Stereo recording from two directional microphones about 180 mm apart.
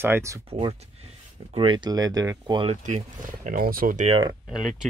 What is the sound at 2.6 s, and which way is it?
Speech, 45° right (ahead or behind).